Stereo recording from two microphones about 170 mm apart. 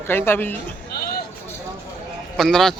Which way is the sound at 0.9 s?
70° left (ahead or behind).